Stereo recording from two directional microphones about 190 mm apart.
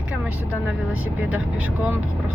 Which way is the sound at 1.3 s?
5° right (ahead or behind).